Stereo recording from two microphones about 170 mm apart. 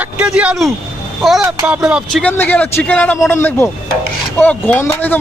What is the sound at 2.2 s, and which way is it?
Speech, 10° left (ahead or behind).